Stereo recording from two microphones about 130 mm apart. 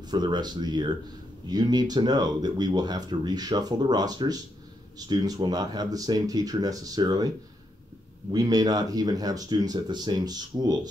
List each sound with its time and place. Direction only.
0.1 s speech: 35° right (ahead or behind)
8.3 s speech: 30° right (ahead or behind)